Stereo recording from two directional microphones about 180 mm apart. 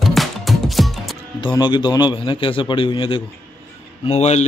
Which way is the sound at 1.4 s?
25° left (ahead or behind).